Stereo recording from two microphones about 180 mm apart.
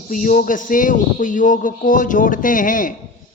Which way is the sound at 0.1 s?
45° left (ahead or behind).